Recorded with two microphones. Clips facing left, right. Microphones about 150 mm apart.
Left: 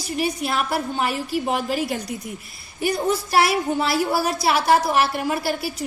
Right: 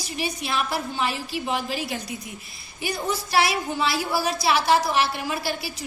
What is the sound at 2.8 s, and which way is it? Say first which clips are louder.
A woman's voice: left 6 dB; 55° left (ahead or behind).